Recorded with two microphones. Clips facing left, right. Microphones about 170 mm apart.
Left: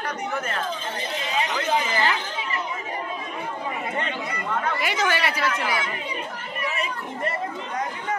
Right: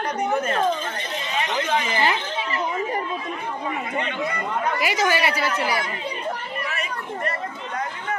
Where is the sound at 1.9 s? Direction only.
20° right (ahead or behind).